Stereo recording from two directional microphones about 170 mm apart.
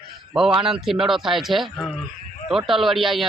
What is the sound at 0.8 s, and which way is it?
A man's voice, centre (ahead or behind).